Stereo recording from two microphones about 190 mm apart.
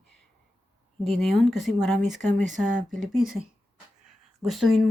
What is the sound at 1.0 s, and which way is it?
Speech, centre (ahead or behind).